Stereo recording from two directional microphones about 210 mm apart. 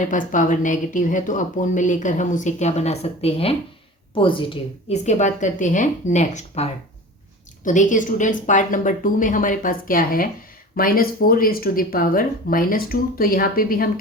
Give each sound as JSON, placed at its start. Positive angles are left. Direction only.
{"t": 0.0, "sound": "speech", "side_deg": 40}